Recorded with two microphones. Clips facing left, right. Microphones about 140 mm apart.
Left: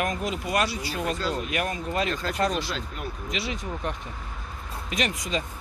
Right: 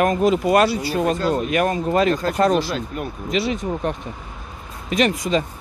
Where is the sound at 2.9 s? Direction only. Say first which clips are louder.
Right 9 dB; 50° right (ahead or behind).